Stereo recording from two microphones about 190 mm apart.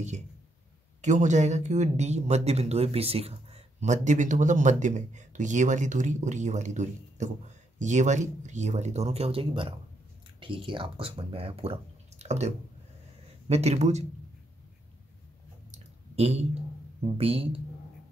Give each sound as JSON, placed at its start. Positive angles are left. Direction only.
{"t": 1.0, "sound": "speech", "side_deg": -40}
{"t": 15.7, "sound": "a sound", "side_deg": -35}
{"t": 17.0, "sound": "speech", "side_deg": -30}